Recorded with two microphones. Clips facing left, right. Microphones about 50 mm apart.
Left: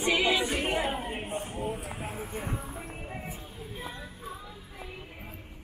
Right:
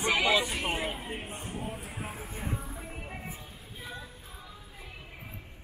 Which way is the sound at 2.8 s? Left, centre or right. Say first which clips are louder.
Left 2 dB; centre.